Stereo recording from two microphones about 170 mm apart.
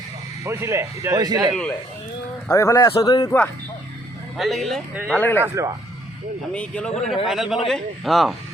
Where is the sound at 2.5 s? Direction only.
20° left (ahead or behind).